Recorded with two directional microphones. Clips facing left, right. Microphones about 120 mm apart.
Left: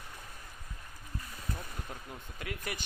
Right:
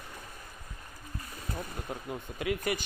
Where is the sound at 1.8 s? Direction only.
15° right (ahead or behind).